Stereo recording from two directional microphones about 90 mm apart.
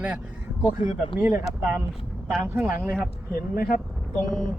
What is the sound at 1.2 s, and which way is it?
Speech, 20° right (ahead or behind).